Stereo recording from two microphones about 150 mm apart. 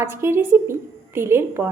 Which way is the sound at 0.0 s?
15° right (ahead or behind).